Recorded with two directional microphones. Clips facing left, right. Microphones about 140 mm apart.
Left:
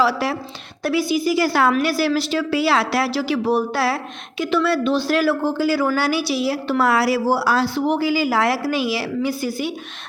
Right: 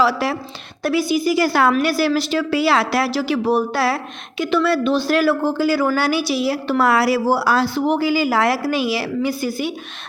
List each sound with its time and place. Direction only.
0.0 s a woman's voice: 65° right (ahead or behind)
0.8 s speech: 50° right (ahead or behind)